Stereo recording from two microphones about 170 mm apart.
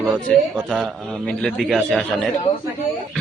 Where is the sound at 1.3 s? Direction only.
5° left (ahead or behind).